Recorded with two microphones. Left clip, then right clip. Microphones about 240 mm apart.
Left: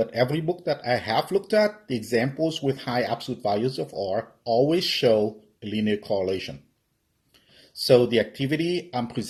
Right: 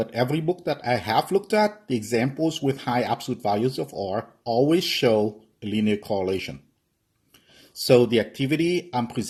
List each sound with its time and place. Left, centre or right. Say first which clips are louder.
0.0 s speech: left 1 dB; right
7.8 s speech: even; right